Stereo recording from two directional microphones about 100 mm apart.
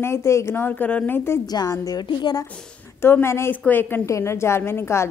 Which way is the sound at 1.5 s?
40° left (ahead or behind).